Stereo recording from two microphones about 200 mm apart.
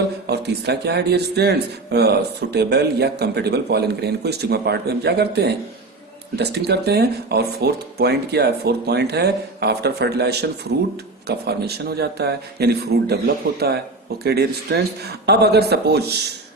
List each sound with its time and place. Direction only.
0.3 s a man's voice: 55° right (ahead or behind)